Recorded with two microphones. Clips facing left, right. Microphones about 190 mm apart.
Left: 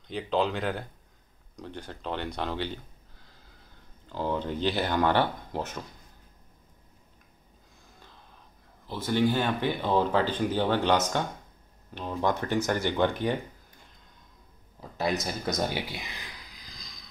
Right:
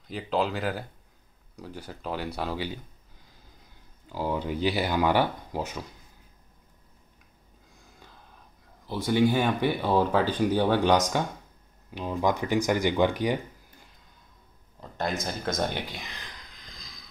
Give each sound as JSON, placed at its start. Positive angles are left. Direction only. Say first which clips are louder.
{"t": 0.1, "sound": "speech", "louder": "even", "side_deg": -5}
{"t": 8.8, "sound": "speech", "louder": "right 2 dB", "side_deg": -15}
{"t": 14.8, "sound": "speech", "louder": "left 2 dB", "side_deg": 5}